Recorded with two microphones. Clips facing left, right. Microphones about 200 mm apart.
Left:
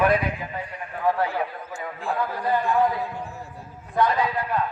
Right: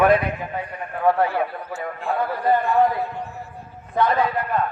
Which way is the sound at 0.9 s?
55° right (ahead or behind).